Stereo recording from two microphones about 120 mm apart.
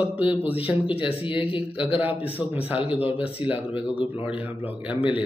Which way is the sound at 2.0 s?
15° right (ahead or behind).